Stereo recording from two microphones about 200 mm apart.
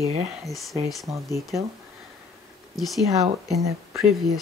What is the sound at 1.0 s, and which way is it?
Speech, 15° right (ahead or behind).